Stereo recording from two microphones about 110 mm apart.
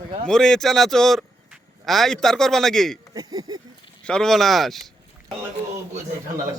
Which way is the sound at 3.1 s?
35° right (ahead or behind).